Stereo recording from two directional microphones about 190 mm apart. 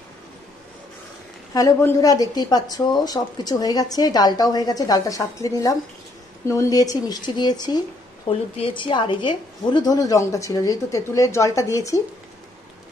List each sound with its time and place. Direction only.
1.5 s a woman's voice: 15° left (ahead or behind)